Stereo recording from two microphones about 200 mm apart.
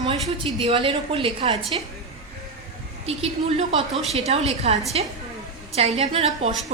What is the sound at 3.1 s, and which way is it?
A woman's voice, 30° right (ahead or behind).